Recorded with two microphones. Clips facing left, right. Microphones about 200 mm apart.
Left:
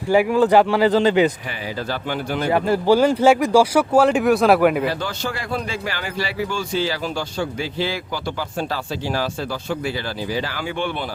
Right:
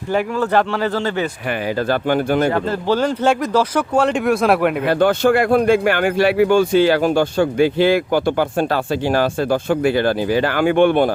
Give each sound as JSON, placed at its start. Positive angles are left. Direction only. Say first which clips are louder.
{"t": 0.1, "sound": "speech", "louder": "left 3 dB", "side_deg": 10}
{"t": 1.9, "sound": "speech", "louder": "right 8 dB", "side_deg": -50}
{"t": 2.5, "sound": "speech", "louder": "left 2 dB", "side_deg": 10}
{"t": 4.9, "sound": "speech", "louder": "right 11 dB", "side_deg": -55}